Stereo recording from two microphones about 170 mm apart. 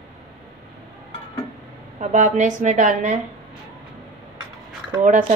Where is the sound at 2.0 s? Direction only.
45° right (ahead or behind).